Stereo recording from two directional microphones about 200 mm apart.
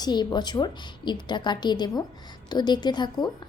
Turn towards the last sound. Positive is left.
turn(degrees=20)  # may be behind; listen again after turning